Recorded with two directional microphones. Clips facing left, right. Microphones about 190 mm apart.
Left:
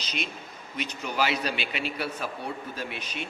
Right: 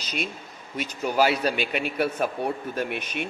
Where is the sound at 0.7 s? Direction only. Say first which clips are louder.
Right 6 dB; 45° right (ahead or behind).